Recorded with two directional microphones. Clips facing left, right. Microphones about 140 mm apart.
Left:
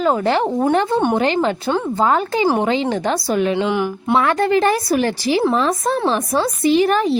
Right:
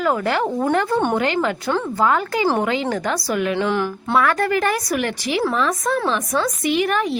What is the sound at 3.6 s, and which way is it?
A woman's voice, 15° left (ahead or behind).